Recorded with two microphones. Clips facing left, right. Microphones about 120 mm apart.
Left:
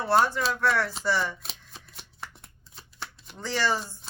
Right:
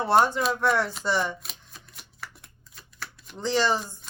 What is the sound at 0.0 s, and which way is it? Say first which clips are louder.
Speech: right 2 dB; 20° right (ahead or behind).